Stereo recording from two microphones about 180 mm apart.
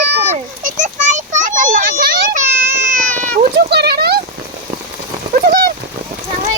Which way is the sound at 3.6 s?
65° right (ahead or behind).